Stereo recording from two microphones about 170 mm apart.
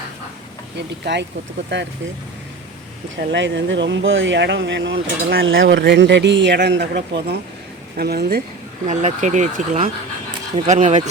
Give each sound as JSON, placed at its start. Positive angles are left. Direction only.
{"t": 0.8, "sound": "speech", "side_deg": -85}
{"t": 3.2, "sound": "speech", "side_deg": -90}
{"t": 8.9, "sound": "speech", "side_deg": -45}